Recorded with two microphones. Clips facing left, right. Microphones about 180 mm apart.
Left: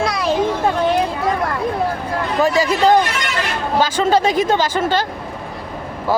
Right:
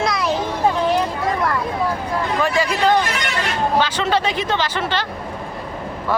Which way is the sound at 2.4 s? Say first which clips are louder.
Left 5 dB; 40° left (ahead or behind).